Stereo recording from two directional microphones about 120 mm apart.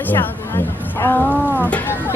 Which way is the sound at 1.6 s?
15° left (ahead or behind).